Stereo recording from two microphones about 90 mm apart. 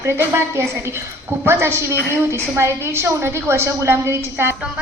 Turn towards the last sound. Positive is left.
turn(degrees=-25)  # may be behind; listen again after turning